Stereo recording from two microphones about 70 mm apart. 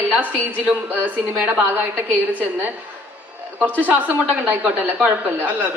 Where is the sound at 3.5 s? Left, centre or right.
Right.